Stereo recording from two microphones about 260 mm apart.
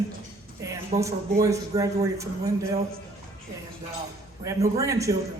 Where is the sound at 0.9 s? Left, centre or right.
Right.